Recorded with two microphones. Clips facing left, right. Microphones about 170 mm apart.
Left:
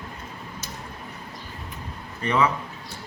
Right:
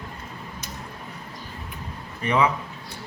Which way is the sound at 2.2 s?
15° right (ahead or behind).